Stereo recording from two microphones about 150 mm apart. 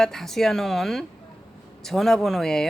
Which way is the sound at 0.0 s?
5° left (ahead or behind).